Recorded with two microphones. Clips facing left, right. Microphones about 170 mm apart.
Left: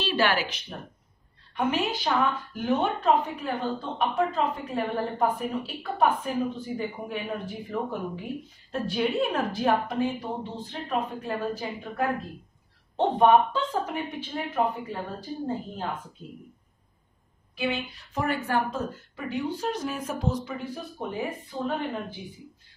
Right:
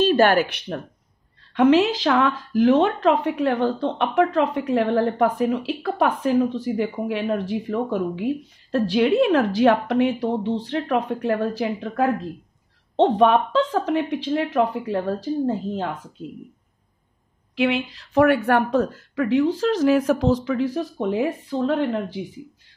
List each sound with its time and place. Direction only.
0.0 s speech: 50° right (ahead or behind); by 0.7 s 65° right (ahead or behind)
1.5 s a woman's voice: 90° right
17.6 s speech: 90° right